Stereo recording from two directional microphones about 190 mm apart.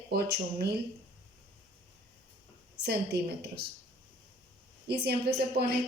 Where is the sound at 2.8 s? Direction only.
60° right (ahead or behind).